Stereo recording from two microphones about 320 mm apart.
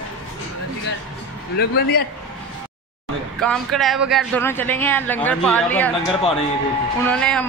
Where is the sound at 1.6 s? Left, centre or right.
Left.